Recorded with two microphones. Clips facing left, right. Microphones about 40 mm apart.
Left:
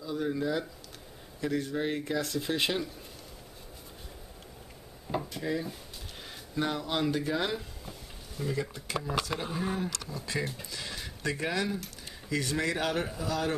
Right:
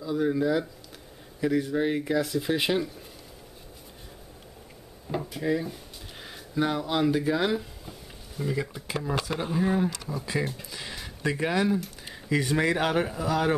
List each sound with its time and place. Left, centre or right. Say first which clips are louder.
0.0 s speech: right 6 dB; centre
5.1 s speech: right 4 dB; centre